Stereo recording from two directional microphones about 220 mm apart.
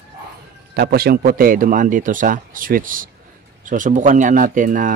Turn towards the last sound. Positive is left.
turn(degrees=-35)  # may be behind; listen again after turning